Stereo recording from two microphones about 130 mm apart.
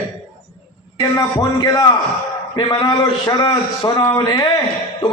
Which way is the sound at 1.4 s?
30° left (ahead or behind).